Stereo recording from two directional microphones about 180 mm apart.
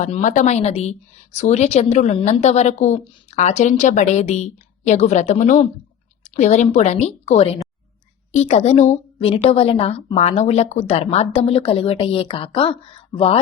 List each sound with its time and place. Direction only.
0.0 s a woman's voice: 45° left (ahead or behind)